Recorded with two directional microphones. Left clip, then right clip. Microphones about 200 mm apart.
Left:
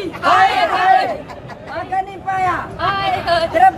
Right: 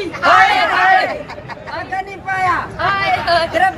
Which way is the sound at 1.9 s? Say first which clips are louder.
Left 2 dB; 10° right (ahead or behind).